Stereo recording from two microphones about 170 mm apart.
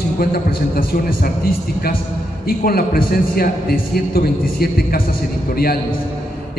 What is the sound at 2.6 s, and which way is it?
A man's voice, 60° left (ahead or behind).